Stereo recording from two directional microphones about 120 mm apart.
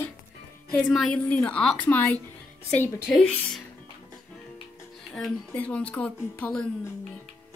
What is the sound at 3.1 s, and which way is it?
Speech, 10° left (ahead or behind).